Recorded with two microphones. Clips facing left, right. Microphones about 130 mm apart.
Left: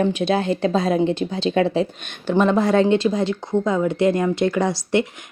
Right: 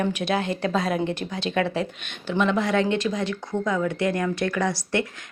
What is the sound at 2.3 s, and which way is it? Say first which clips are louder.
Speech: left 5 dB; 40° left (ahead or behind).